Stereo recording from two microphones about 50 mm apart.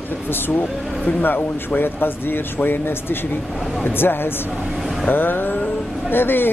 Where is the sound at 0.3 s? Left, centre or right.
Left.